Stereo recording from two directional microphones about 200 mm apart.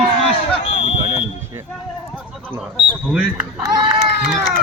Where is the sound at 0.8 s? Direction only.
30° left (ahead or behind).